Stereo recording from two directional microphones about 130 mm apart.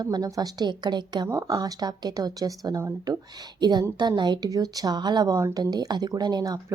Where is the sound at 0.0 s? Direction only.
30° right (ahead or behind).